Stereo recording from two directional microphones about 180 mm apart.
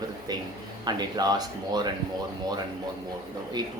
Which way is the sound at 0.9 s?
20° right (ahead or behind).